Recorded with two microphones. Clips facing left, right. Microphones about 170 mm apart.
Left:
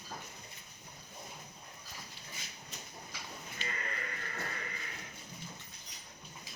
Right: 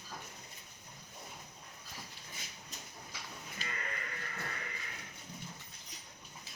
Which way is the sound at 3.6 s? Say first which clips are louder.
Left 2 dB; 40° right (ahead or behind).